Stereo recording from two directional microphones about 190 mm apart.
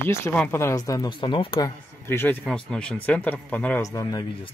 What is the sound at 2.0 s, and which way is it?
Speech, 10° left (ahead or behind).